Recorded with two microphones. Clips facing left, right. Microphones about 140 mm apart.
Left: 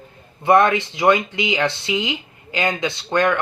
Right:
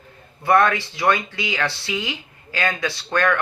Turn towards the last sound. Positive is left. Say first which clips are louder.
# left 2 dB
turn(degrees=20)  # may be behind; listen again after turning